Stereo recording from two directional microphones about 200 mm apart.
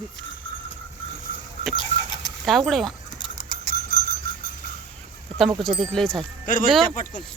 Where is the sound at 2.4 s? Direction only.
Centre (ahead or behind).